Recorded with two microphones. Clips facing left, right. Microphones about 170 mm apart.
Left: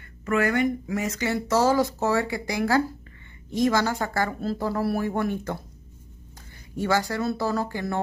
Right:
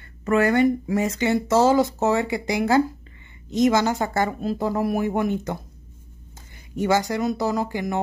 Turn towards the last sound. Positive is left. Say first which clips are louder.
# right 2 dB
turn(degrees=-15)  # may be behind; listen again after turning